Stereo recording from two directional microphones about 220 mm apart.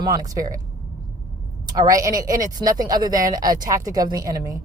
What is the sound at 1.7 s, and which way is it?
Speech, 15° right (ahead or behind).